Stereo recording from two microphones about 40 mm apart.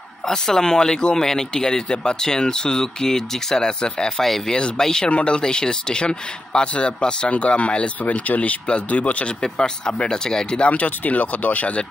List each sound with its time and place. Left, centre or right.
0.2 s speech: centre
4.2 s speech: centre; by 9.3 s left
9.4 s speech: centre
10.7 s speech: left